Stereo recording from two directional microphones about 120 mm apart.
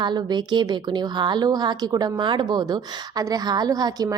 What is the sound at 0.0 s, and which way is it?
A woman's voice, 40° right (ahead or behind).